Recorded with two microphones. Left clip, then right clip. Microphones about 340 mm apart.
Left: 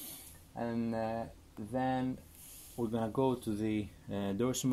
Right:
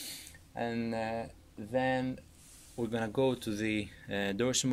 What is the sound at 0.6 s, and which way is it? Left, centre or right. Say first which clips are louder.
Speech: right 2 dB; right.